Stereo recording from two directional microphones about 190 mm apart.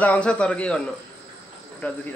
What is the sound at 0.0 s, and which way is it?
Speech, 5° left (ahead or behind).